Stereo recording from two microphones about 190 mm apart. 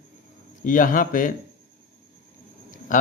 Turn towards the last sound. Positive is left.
turn(degrees=45)  # may be behind; listen again after turning